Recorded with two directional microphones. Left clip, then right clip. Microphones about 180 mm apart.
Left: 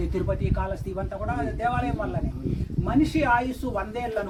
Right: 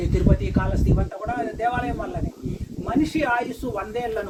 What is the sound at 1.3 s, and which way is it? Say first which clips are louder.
Speech: right 3 dB; 15° left (ahead or behind).